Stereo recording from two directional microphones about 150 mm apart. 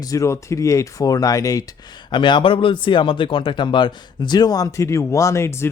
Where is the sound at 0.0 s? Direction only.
20° left (ahead or behind).